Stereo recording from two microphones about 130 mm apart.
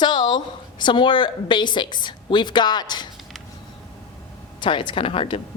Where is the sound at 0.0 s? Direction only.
35° left (ahead or behind).